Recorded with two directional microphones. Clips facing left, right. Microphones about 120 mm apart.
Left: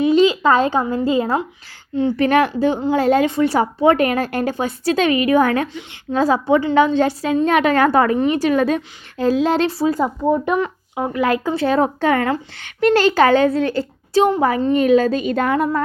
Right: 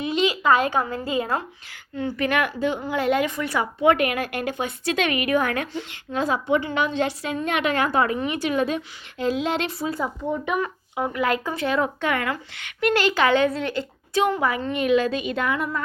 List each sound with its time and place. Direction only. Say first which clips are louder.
0.0 s a child's voice: left 8 dB; 30° left (ahead or behind)